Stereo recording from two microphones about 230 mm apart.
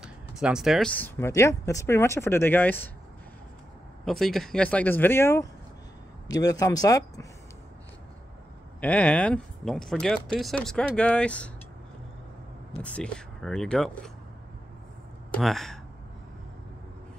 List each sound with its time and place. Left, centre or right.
0.0 s speech: centre
4.0 s speech: centre
8.8 s speech: centre
12.8 s speech: centre
15.3 s speech: centre